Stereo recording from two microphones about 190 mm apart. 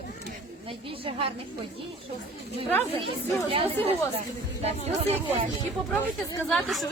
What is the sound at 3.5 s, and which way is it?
A woman's voice, 30° right (ahead or behind).